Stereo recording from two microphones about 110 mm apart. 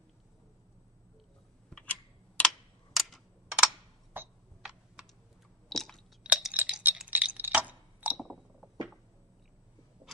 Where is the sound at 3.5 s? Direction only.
15° right (ahead or behind).